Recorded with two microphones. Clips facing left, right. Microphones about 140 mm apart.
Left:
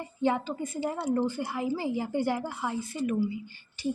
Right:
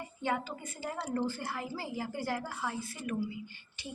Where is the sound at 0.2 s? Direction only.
25° left (ahead or behind).